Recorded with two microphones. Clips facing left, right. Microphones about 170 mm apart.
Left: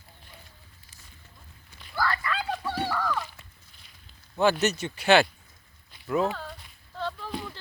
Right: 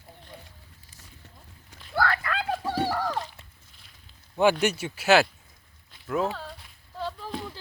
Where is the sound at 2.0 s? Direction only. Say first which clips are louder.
Right 2 dB; 60° right (ahead or behind).